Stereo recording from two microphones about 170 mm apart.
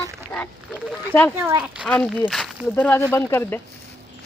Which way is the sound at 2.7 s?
10° left (ahead or behind).